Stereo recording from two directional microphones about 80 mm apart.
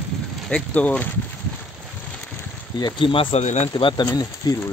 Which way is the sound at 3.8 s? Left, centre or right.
Left.